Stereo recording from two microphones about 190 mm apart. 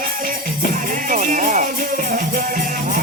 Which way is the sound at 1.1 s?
45° right (ahead or behind).